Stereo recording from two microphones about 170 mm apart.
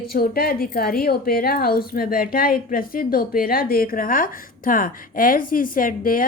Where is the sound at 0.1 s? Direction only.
65° left (ahead or behind).